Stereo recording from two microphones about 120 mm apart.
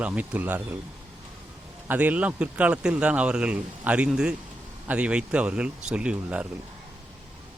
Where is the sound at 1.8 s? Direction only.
15° right (ahead or behind).